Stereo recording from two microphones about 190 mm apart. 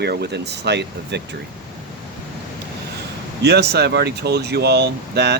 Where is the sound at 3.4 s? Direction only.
60° right (ahead or behind).